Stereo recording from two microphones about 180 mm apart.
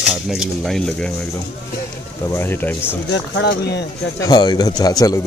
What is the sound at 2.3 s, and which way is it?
Speech, 10° left (ahead or behind).